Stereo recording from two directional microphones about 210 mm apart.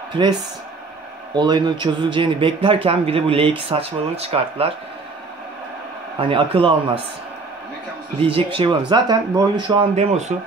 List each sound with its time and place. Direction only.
1.3 s speech: 20° right (ahead or behind)
6.2 s speech: 25° right (ahead or behind)
8.2 s speech: 25° right (ahead or behind)